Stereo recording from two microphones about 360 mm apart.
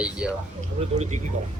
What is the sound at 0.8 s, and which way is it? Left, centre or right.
Speech, centre.